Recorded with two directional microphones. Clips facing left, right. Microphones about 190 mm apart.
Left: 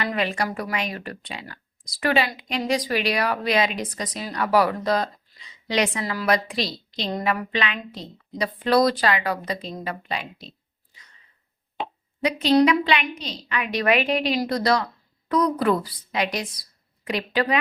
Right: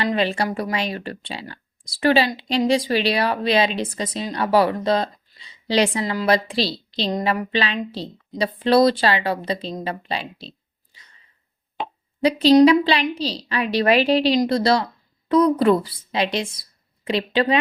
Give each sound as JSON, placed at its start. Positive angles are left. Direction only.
{"t": 0.0, "sound": "speech", "side_deg": -30}
{"t": 7.1, "sound": "speech", "side_deg": -20}
{"t": 7.5, "sound": "a woman's voice", "side_deg": -30}
{"t": 12.2, "sound": "a woman's voice", "side_deg": -30}